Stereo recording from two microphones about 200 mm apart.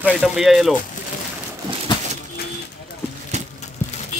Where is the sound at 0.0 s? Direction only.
Centre (ahead or behind).